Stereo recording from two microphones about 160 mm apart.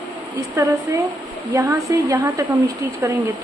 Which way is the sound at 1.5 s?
20° right (ahead or behind).